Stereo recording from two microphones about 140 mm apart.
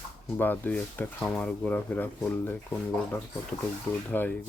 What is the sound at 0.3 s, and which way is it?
Speech, 15° left (ahead or behind).